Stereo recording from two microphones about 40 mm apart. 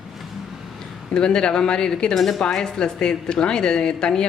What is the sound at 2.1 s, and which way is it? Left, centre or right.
Speech, centre.